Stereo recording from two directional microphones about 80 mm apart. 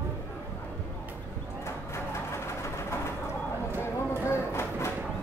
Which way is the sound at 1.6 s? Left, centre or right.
Left.